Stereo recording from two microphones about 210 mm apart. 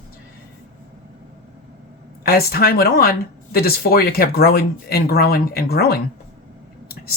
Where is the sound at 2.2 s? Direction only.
45° left (ahead or behind).